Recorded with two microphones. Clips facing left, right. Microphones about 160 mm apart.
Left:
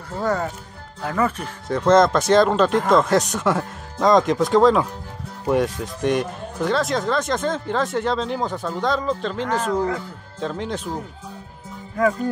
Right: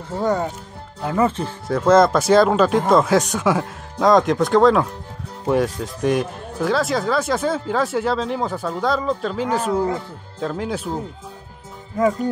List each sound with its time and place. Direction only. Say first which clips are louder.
0.1 s speech: right 2 dB; 20° right (ahead or behind)
1.7 s speech: right 1 dB; 5° right (ahead or behind)
12.0 s speech: right 1 dB; 20° right (ahead or behind)